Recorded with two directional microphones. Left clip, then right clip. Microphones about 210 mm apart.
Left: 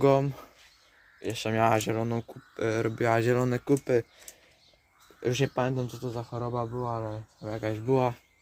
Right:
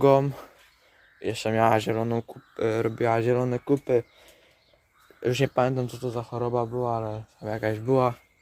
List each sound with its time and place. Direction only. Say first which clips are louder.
0.0 s speech: right 4 dB; 15° right (ahead or behind); by 4.0 s centre (ahead or behind)
5.2 s speech: right 4 dB; 20° right (ahead or behind)